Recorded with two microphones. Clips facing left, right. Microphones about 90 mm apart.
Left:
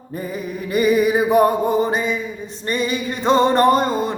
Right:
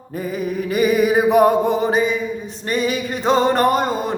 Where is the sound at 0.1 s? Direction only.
5° right (ahead or behind).